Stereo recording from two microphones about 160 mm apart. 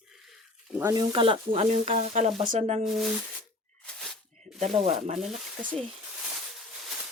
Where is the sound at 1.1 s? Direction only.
35° right (ahead or behind).